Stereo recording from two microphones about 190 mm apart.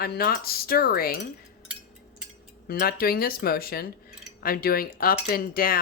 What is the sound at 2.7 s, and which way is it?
Speech, 55° left (ahead or behind).